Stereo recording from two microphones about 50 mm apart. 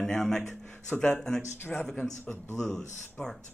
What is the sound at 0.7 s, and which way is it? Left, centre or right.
Speech, left.